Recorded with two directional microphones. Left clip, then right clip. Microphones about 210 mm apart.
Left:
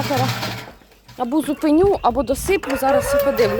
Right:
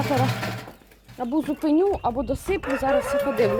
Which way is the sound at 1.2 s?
25° left (ahead or behind).